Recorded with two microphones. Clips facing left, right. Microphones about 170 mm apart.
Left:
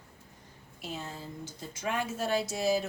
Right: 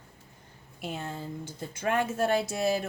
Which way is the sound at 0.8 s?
60° right (ahead or behind).